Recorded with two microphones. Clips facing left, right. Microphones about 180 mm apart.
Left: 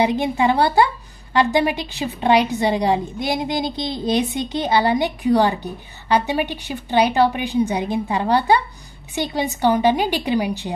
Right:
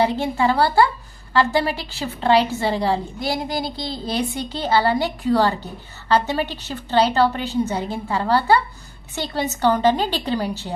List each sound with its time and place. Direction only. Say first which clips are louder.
0.0 s a woman's voice: left 1 dB; 15° left (ahead or behind)